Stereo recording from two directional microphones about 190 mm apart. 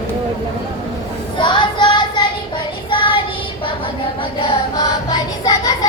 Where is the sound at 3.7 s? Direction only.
25° left (ahead or behind).